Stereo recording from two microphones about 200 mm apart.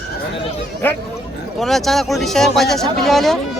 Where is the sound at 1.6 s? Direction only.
Centre (ahead or behind).